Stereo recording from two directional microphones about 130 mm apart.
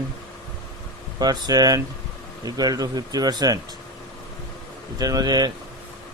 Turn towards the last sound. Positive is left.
turn(degrees=-30)  # may be behind; listen again after turning